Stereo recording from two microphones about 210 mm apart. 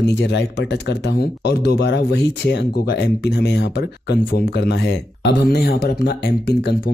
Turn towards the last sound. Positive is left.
turn(degrees=50)  # may be behind; listen again after turning